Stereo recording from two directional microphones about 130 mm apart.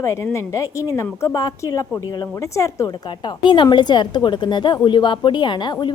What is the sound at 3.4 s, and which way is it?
A woman's voice, 40° left (ahead or behind).